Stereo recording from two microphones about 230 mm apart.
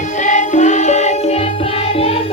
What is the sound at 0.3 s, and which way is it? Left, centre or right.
Music, left.